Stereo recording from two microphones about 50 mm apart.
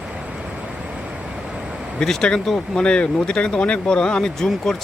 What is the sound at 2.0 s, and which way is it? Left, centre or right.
Speech, centre.